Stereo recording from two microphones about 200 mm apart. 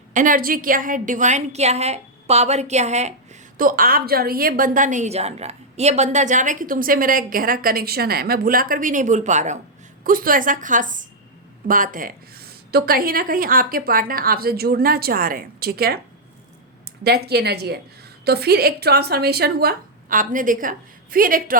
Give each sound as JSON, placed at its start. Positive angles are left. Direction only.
{"t": 0.1, "sound": "a woman's voice", "side_deg": -40}
{"t": 3.6, "sound": "a woman's voice", "side_deg": -45}
{"t": 17.0, "sound": "a woman's voice", "side_deg": -55}